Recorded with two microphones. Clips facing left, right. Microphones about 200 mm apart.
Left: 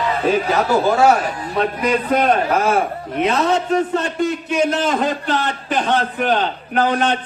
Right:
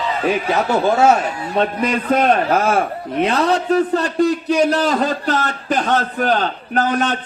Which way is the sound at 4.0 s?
35° right (ahead or behind).